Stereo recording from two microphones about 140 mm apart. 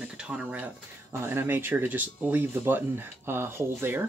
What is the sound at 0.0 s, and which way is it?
Speech, 5° right (ahead or behind).